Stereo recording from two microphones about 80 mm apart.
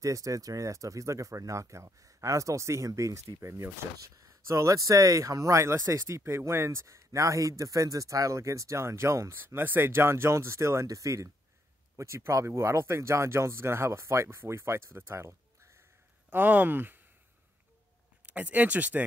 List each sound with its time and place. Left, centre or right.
0.0 s speech: right
16.3 s speech: right
18.2 s speech: centre